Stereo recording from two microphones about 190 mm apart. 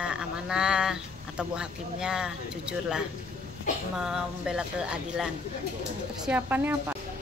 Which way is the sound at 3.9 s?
5° right (ahead or behind).